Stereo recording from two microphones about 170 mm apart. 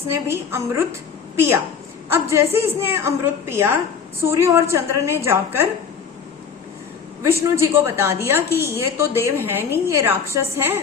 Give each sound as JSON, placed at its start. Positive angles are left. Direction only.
{"t": 0.1, "sound": "a woman's voice", "side_deg": -15}
{"t": 2.0, "sound": "a woman's voice", "side_deg": -15}
{"t": 7.4, "sound": "a woman's voice", "side_deg": -15}